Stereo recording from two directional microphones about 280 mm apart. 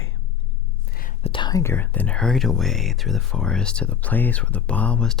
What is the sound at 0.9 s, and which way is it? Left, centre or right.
Whispering, left.